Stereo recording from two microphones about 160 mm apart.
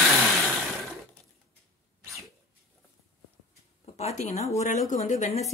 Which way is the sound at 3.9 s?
45° left (ahead or behind).